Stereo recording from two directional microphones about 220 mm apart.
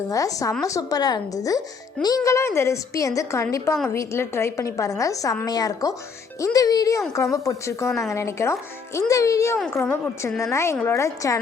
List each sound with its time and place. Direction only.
0.1 s a woman's voice: 15° left (ahead or behind)